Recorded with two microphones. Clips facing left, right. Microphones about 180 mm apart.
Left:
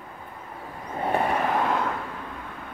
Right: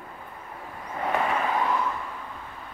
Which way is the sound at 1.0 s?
35° left (ahead or behind).